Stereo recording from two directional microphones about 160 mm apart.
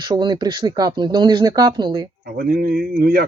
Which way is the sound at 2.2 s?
65° right (ahead or behind).